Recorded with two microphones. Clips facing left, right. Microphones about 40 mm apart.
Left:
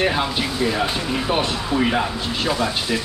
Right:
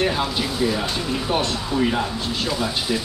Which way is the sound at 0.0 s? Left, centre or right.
Centre.